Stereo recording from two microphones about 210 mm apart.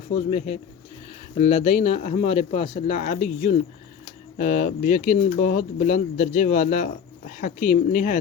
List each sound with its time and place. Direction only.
0.3 s speech: 30° left (ahead or behind)